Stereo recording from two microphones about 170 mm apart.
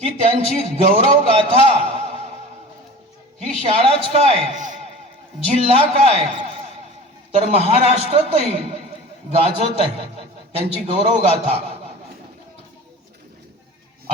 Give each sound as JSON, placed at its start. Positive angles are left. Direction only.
{"t": 0.0, "sound": "a man's voice", "side_deg": -35}
{"t": 3.4, "sound": "a man's voice", "side_deg": -35}